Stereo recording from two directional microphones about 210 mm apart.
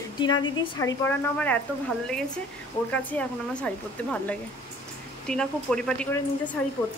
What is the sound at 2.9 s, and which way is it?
Speech, 5° left (ahead or behind).